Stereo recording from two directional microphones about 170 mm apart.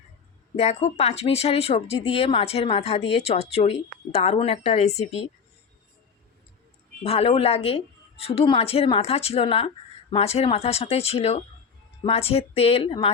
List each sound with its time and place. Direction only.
0.5 s speech: 40° left (ahead or behind)
7.0 s speech: 35° left (ahead or behind)